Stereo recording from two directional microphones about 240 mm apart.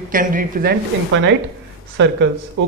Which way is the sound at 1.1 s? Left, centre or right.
Right.